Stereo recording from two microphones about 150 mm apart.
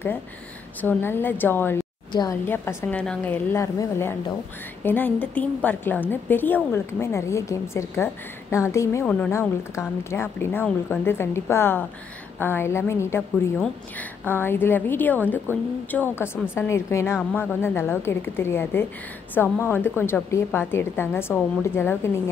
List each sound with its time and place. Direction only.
0.7 s a woman's voice: 15° left (ahead or behind)
9.0 s a woman's voice: 10° left (ahead or behind)